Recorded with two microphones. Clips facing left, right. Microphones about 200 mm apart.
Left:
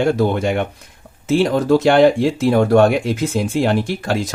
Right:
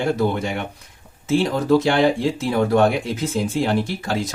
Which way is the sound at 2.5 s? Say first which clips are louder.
Left 5 dB; 50° left (ahead or behind).